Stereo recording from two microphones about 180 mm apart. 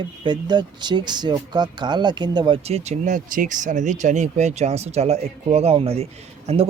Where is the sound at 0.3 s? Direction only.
25° right (ahead or behind).